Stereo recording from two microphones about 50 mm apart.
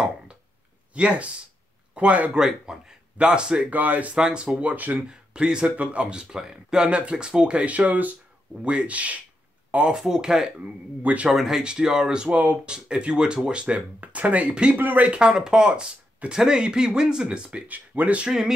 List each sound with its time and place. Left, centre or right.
0.9 s speech: right
2.3 s speech: centre
3.7 s speech: right
4.2 s speech: centre
4.6 s speech: right
4.9 s speech: centre
9.9 s speech: centre
10.6 s speech: right
11.2 s speech: centre; by 14.8 s right
14.8 s speech: right
15.0 s speech: centre
17.5 s speech: right